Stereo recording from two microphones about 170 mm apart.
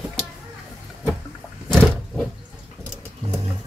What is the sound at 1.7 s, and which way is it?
Roaring cats, centre (ahead or behind).